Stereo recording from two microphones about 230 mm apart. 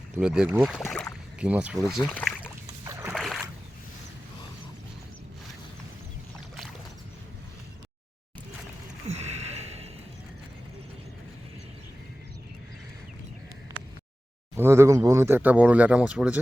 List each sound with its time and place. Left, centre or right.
0.2 s speech: centre
2.8 s boat: centre
3.2 s boat: centre
9.0 s a sound: right
14.5 s speech: centre